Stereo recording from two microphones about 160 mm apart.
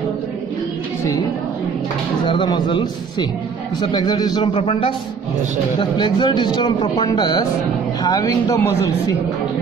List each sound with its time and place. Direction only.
2.2 s a man's voice: 30° left (ahead or behind)